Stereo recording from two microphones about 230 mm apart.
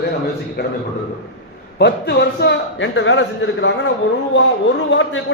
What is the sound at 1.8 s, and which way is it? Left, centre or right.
A man's voice, left.